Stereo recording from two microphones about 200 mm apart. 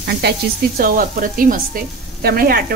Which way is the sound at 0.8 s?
45° right (ahead or behind).